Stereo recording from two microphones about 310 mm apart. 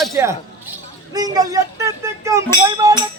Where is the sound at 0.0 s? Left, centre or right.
Centre.